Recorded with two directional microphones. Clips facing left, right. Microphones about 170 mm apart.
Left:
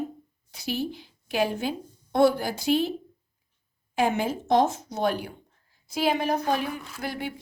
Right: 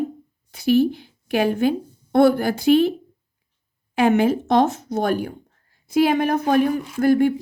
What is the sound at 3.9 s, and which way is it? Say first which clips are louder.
A woman's voice: right 8 dB; 65° right (ahead or behind).